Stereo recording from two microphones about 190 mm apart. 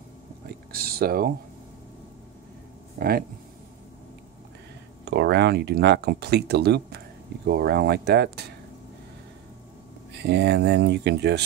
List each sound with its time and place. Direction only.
0.7 s speech: 55° right (ahead or behind)
3.0 s speech: 50° right (ahead or behind)
5.0 s speech: 60° right (ahead or behind)
10.1 s speech: 60° right (ahead or behind)